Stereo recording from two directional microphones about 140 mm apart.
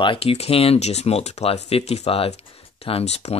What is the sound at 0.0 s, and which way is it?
Speech, 40° left (ahead or behind).